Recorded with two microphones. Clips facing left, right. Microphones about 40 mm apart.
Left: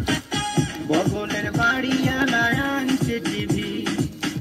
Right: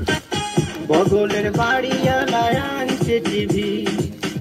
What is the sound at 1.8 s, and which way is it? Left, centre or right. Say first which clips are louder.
Music: right 3 dB; centre.